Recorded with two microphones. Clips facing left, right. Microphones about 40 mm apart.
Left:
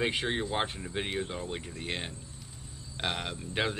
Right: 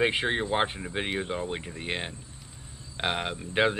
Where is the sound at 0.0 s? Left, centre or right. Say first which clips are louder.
Right 5 dB; right.